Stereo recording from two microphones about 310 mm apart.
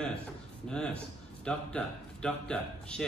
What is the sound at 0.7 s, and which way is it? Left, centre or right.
Speech, centre.